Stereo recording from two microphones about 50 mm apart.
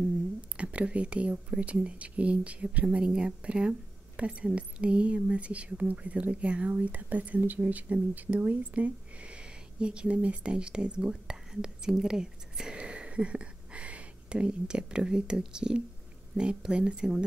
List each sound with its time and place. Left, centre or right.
0.6 s a woman's voice: right